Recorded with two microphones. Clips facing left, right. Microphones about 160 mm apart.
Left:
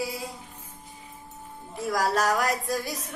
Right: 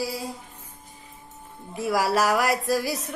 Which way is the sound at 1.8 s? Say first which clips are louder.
Right 3 dB; 10° right (ahead or behind).